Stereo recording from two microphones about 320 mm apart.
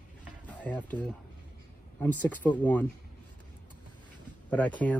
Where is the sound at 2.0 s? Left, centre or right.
Centre.